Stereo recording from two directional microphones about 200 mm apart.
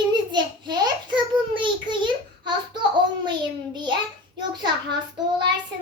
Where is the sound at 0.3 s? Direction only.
20° right (ahead or behind).